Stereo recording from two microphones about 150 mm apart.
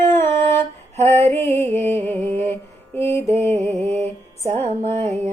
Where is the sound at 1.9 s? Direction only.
15° left (ahead or behind).